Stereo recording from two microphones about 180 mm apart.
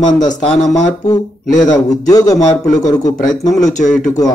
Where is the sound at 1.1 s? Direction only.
20° left (ahead or behind).